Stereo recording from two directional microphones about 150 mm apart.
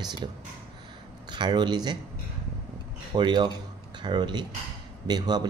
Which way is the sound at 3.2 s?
30° right (ahead or behind).